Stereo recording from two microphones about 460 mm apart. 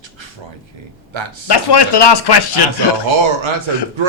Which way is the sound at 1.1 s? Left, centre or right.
Right.